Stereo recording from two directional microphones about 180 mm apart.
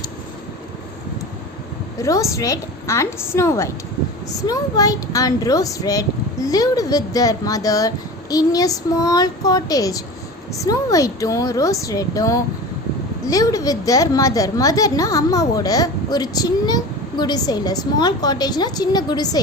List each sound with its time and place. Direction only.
2.0 s a woman's voice: 15° left (ahead or behind)